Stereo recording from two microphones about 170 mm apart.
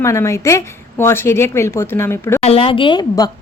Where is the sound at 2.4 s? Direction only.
35° left (ahead or behind).